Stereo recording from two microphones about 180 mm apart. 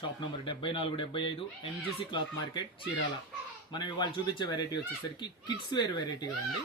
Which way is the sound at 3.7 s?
25° left (ahead or behind).